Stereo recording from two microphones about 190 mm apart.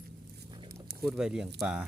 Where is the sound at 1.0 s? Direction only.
5° right (ahead or behind).